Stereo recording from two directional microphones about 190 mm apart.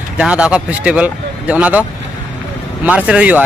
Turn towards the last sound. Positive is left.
turn(degrees=-5)  # may be behind; listen again after turning